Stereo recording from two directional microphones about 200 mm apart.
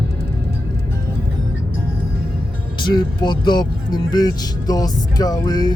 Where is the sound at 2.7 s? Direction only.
20° left (ahead or behind).